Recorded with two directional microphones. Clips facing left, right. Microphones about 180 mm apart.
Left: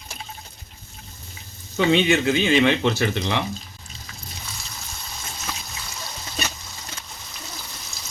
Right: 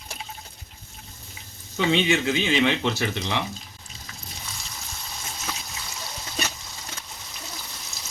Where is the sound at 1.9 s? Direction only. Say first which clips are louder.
Left 3 dB; 55° left (ahead or behind).